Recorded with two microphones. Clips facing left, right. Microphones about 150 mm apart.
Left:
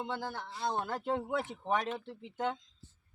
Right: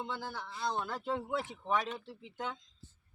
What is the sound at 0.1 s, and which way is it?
Speech, 50° left (ahead or behind).